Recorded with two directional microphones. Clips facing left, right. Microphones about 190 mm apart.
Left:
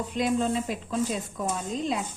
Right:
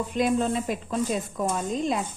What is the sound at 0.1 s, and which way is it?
Speech, 50° right (ahead or behind).